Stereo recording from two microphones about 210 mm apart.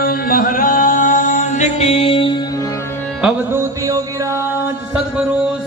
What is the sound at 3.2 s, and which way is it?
Music, 10° right (ahead or behind).